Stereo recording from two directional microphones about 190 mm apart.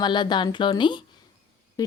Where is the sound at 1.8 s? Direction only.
20° left (ahead or behind).